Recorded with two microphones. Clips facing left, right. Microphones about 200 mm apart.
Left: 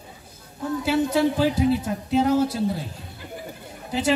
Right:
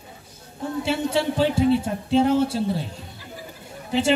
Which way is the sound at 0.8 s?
25° right (ahead or behind).